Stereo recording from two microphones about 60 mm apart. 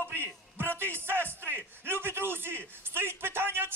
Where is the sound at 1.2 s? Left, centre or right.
Left.